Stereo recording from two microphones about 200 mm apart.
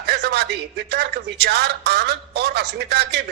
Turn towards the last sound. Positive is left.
turn(degrees=-55)  # may be behind; listen again after turning